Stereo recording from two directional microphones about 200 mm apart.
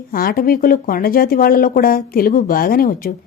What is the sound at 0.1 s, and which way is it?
A woman's voice, 45° left (ahead or behind).